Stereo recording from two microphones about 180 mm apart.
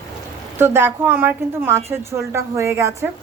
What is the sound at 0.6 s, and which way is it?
A woman's voice, 10° right (ahead or behind).